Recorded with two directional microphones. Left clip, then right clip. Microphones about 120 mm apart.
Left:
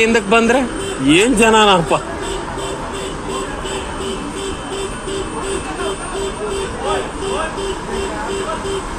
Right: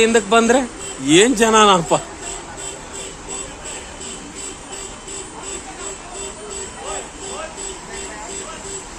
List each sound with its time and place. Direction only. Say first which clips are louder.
0.0 s a man's voice: left 1 dB; 50° right (ahead or behind)
1.1 s a man's voice: left 1 dB; 80° right